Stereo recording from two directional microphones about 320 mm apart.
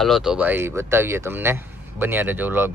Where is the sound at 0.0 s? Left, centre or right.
Centre.